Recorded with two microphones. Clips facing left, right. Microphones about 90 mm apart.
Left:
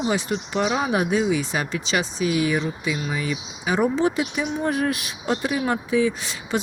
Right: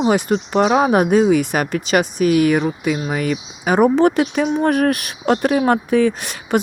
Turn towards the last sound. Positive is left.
turn(degrees=-60)  # may be behind; listen again after turning